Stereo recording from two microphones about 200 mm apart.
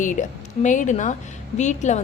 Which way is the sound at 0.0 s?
40° left (ahead or behind).